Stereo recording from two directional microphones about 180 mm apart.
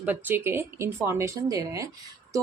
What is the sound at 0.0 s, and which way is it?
A woman's voice, 10° right (ahead or behind).